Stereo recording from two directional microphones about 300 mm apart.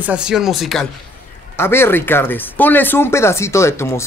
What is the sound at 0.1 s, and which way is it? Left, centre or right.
Speech, centre.